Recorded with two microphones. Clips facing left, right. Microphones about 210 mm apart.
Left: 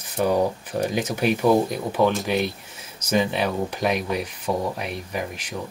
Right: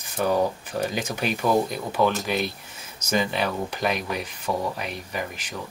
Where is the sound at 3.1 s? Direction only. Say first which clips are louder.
Left 3 dB; 10° left (ahead or behind).